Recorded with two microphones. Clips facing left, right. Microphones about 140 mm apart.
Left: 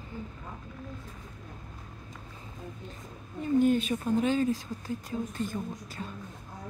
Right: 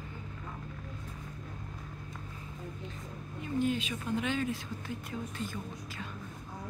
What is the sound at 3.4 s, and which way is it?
Speech, 45° left (ahead or behind).